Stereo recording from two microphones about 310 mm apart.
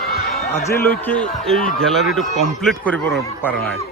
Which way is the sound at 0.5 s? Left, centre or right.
Centre.